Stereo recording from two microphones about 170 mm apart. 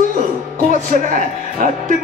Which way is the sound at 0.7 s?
50° right (ahead or behind).